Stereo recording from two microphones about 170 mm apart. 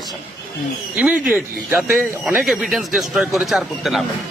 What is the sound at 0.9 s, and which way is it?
Speech, 10° right (ahead or behind).